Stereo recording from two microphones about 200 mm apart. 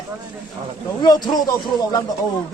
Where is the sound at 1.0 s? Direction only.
20° left (ahead or behind).